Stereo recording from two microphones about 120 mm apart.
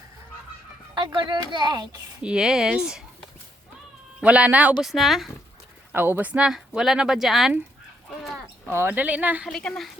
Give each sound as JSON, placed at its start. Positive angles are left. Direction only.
{"t": 0.9, "sound": "music", "side_deg": -40}
{"t": 1.5, "sound": "a child's voice", "side_deg": -35}
{"t": 2.2, "sound": "a woman's voice", "side_deg": -5}
{"t": 5.9, "sound": "speech", "side_deg": -15}
{"t": 8.7, "sound": "a woman's voice", "side_deg": -20}
{"t": 9.5, "sound": "speech", "side_deg": 5}